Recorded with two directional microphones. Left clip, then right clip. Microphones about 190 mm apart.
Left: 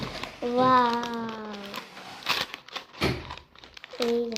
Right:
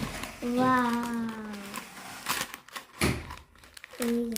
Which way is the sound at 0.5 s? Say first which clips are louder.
Left 5 dB; 30° right (ahead or behind).